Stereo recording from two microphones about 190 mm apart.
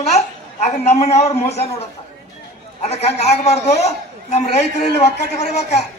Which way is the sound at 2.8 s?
35° left (ahead or behind).